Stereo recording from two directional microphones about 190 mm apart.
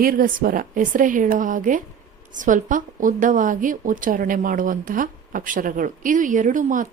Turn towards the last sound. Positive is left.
turn(degrees=-45)  # may be behind; listen again after turning